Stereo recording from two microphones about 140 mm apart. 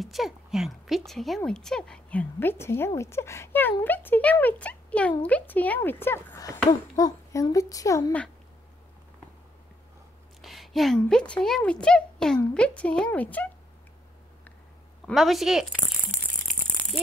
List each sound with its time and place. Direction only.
0.0 s a woman's voice: centre (ahead or behind); by 8.1 s 25° left (ahead or behind)
10.4 s speech: centre (ahead or behind)
15.0 s a woman's voice: centre (ahead or behind)